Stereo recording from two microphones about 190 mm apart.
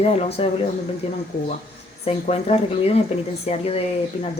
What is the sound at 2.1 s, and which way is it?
Speech, 35° left (ahead or behind).